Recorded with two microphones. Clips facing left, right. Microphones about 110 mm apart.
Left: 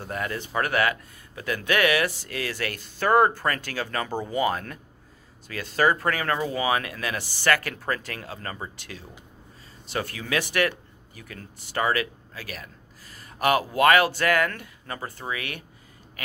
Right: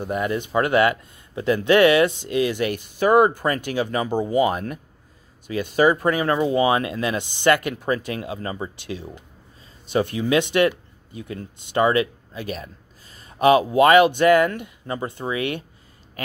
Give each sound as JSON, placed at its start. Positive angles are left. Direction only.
{"t": 0.0, "sound": "speech", "side_deg": -20}